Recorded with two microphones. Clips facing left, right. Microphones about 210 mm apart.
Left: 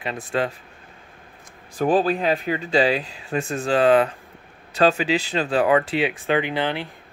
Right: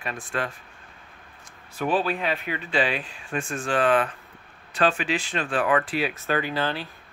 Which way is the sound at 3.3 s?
25° left (ahead or behind).